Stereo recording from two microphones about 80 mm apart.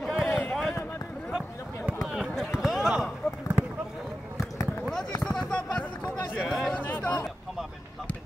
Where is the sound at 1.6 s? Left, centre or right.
Left.